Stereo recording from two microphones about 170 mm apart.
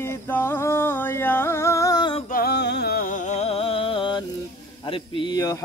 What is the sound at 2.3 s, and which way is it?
Music, 70° left (ahead or behind).